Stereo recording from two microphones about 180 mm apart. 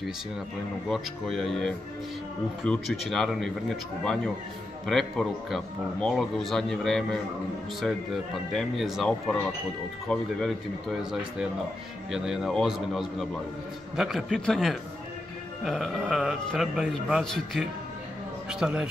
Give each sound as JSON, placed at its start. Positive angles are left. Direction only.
{"t": 0.8, "sound": "a man's voice", "side_deg": 0}